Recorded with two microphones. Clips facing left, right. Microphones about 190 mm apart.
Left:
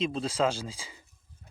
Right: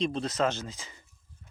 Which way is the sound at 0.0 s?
5° left (ahead or behind).